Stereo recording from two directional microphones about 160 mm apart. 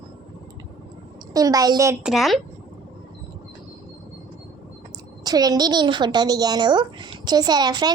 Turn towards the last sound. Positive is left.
turn(degrees=-25)  # may be behind; listen again after turning